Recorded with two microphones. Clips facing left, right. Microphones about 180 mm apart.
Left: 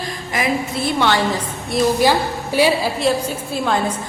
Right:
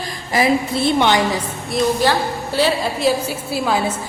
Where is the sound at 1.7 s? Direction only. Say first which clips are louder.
Left 1 dB; 10° left (ahead or behind).